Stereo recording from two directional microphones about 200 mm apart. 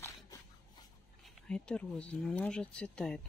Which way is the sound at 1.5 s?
5° left (ahead or behind).